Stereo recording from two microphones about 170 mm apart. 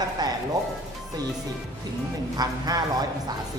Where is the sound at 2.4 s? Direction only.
20° right (ahead or behind).